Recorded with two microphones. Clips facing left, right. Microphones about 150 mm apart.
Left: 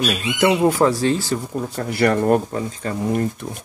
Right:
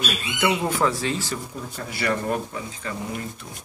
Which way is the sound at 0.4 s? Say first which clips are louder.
Left 7 dB; 35° left (ahead or behind).